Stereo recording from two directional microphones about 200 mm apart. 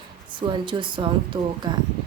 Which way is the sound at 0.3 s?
25° right (ahead or behind).